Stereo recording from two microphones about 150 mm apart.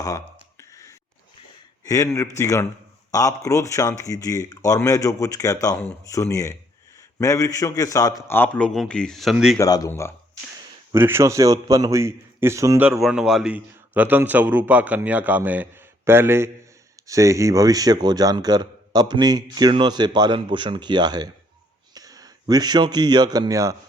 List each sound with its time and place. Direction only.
0.6 s a sound: 20° left (ahead or behind)
1.8 s a man's voice: 20° left (ahead or behind); by 9.6 s 5° right (ahead or behind)
9.6 s speech: 25° left (ahead or behind)
10.9 s a man's voice: 15° right (ahead or behind)
12.9 s a man's voice: 5° right (ahead or behind); by 23.7 s 25° right (ahead or behind)